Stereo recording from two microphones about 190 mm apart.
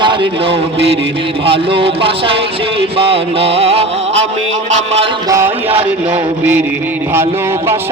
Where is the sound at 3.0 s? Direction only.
30° right (ahead or behind).